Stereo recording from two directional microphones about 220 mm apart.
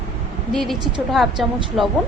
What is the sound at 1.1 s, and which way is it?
Speech, centre (ahead or behind).